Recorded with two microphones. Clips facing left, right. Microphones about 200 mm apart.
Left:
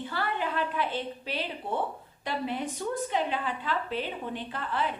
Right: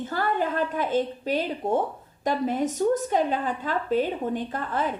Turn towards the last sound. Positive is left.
turn(degrees=-45)  # may be behind; listen again after turning